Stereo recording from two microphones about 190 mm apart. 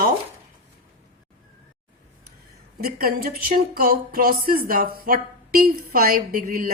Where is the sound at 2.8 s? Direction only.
55° right (ahead or behind).